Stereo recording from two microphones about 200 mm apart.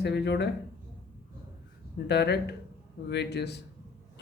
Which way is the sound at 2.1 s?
55° left (ahead or behind).